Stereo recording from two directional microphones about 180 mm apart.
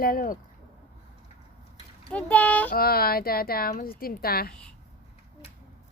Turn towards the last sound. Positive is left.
turn(degrees=5)  # may be behind; listen again after turning